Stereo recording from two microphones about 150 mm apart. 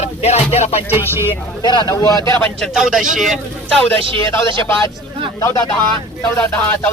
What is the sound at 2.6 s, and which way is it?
Speech, 5° right (ahead or behind).